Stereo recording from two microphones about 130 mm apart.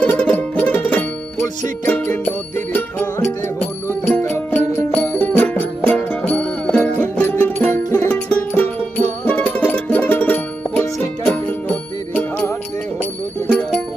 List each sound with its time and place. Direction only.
0.0 s music: 10° left (ahead or behind)